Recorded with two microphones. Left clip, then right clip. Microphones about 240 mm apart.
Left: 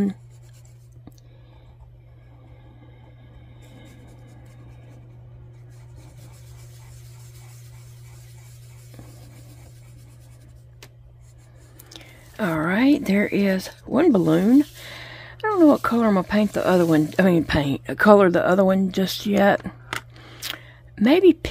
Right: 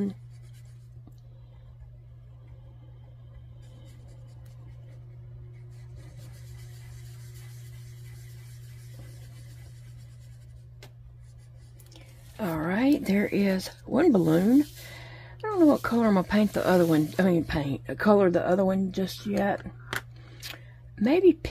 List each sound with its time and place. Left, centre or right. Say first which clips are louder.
11.9 s speech: left 10 dB; left